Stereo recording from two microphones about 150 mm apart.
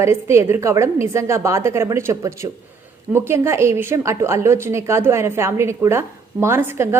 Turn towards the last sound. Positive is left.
turn(degrees=-15)  # may be behind; listen again after turning